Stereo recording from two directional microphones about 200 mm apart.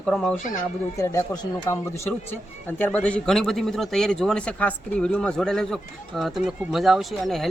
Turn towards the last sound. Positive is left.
turn(degrees=0)  # may be behind; listen again after turning